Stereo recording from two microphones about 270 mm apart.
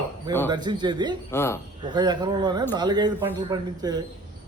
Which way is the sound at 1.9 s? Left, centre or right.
Centre.